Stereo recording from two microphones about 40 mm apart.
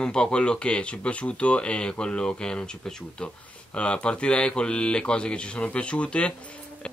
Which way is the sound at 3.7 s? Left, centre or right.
Left.